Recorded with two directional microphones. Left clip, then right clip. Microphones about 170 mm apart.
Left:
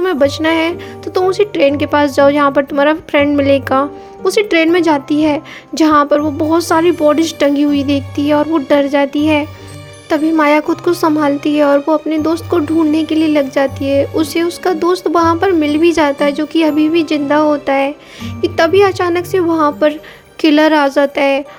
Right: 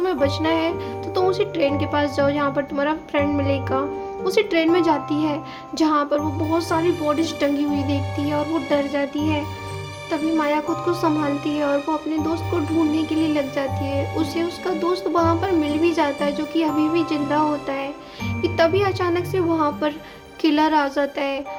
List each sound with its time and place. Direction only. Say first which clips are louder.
0.0 s speech: left 8 dB; 45° left (ahead or behind)